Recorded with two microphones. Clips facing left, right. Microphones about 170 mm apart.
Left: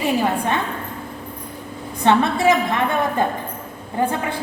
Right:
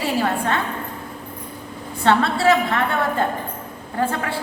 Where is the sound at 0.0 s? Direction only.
15° left (ahead or behind).